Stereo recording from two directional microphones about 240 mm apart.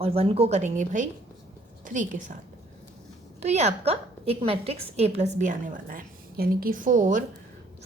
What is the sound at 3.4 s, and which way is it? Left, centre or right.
A woman's voice, right.